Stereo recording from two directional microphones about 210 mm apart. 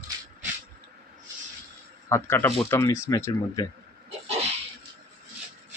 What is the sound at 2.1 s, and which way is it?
Speech, 10° left (ahead or behind).